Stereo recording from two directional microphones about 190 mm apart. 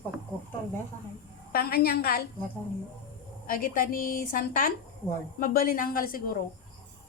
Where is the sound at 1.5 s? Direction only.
50° left (ahead or behind).